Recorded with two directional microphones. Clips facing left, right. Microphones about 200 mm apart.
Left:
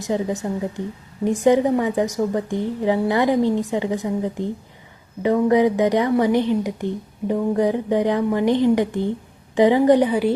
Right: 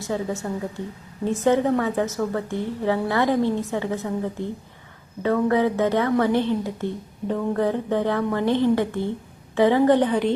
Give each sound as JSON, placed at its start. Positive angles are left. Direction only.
{"t": 0.0, "sound": "a woman's voice", "side_deg": 15}